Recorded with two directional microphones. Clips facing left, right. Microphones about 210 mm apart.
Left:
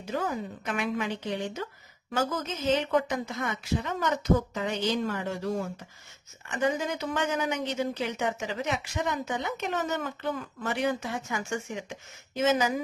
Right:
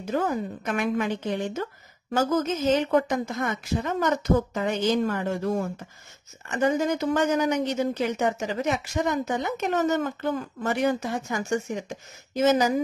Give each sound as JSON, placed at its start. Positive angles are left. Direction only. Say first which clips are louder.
{"t": 0.0, "sound": "a woman's voice", "louder": "right 5 dB", "side_deg": -50}